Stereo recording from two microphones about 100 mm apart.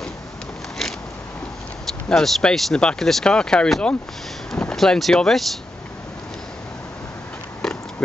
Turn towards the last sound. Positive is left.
turn(degrees=5)  # may be behind; listen again after turning